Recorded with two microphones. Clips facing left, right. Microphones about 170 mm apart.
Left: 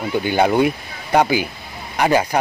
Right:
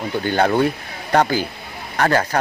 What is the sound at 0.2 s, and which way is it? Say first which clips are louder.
Speech: left 1 dB; 10° left (ahead or behind).